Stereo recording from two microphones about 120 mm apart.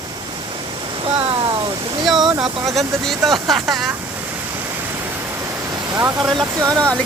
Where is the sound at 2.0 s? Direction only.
5° right (ahead or behind).